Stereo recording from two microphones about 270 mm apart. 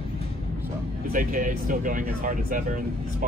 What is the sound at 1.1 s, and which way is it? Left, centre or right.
Speech, right.